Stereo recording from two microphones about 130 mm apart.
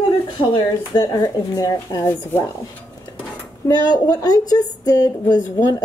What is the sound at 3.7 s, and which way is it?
Speech, 30° left (ahead or behind).